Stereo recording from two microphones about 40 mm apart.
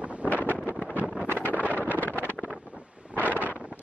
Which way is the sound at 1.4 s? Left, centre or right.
Right.